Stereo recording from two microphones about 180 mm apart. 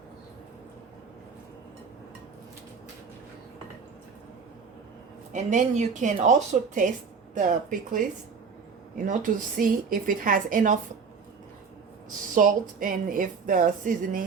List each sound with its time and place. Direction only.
5.3 s speech: 40° right (ahead or behind)
12.3 s speech: 50° right (ahead or behind)